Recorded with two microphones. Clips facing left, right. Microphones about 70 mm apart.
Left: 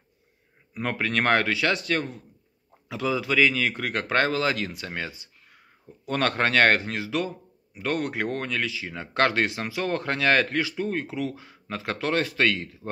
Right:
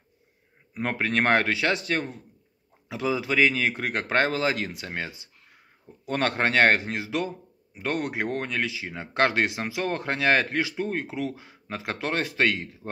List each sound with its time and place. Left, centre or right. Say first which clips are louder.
0.7 s a man's voice: right 1 dB; right